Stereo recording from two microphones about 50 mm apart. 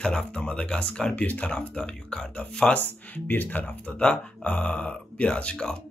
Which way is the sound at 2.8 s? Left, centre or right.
Left.